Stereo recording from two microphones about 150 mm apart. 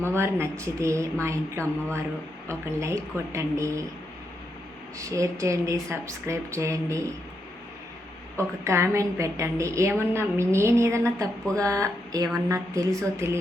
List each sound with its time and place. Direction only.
0.0 s a woman's voice: 15° right (ahead or behind)
4.9 s a woman's voice: 20° right (ahead or behind)
8.4 s a woman's voice: 20° right (ahead or behind)